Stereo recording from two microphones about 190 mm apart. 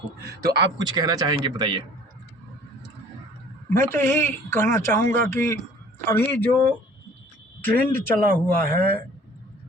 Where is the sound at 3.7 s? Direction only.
10° left (ahead or behind).